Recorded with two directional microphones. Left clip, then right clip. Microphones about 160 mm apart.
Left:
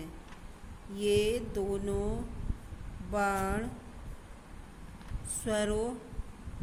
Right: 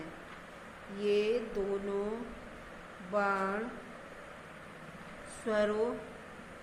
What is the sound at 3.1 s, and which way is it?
Speech, 55° left (ahead or behind).